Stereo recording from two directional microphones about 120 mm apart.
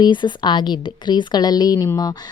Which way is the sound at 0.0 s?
40° left (ahead or behind).